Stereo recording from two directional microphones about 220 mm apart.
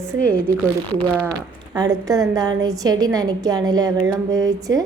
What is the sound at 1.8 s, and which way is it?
A woman's voice, 15° right (ahead or behind).